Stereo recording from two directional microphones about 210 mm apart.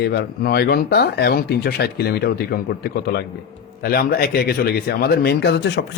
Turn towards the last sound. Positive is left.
turn(degrees=55)  # may be behind; listen again after turning